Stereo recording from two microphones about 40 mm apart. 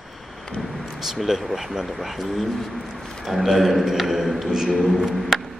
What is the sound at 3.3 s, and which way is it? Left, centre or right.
A man's voice, centre.